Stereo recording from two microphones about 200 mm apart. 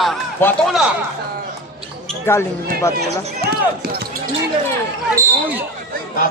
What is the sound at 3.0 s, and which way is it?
Speech, 50° right (ahead or behind).